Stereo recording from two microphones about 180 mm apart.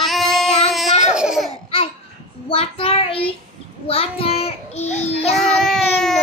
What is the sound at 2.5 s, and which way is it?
A child's voice, 30° left (ahead or behind).